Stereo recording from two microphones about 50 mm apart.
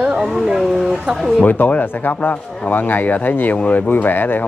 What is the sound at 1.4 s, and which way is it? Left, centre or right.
Speech, left.